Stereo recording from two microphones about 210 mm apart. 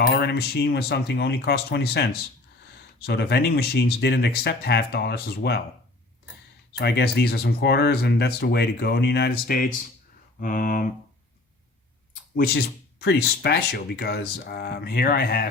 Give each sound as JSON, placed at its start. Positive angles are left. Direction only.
{"t": 0.1, "sound": "speech", "side_deg": 50}
{"t": 6.7, "sound": "speech", "side_deg": 50}
{"t": 12.1, "sound": "speech", "side_deg": 45}